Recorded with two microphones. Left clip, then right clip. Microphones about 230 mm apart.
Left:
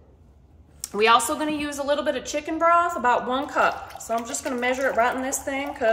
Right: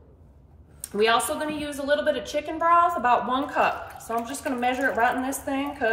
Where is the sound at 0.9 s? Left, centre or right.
Left.